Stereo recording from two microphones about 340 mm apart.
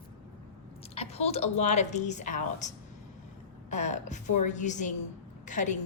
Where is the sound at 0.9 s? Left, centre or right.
Centre.